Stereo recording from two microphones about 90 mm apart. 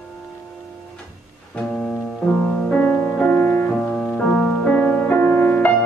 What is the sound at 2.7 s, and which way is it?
Music, 15° left (ahead or behind).